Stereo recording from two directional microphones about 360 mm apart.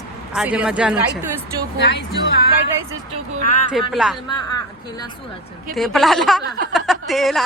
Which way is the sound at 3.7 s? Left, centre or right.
Centre.